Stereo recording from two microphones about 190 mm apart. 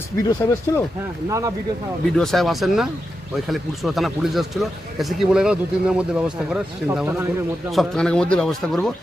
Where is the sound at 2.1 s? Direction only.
Centre (ahead or behind).